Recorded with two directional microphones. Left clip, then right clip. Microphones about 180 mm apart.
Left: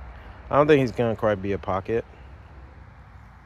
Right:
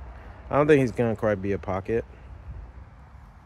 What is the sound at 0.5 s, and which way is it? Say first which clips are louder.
Speech: left 2 dB; 20° right (ahead or behind).